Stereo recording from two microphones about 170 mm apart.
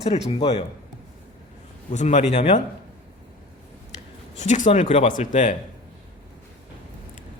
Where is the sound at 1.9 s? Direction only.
45° left (ahead or behind).